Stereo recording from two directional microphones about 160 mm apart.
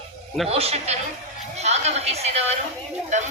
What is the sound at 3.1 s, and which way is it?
Speech, 50° right (ahead or behind).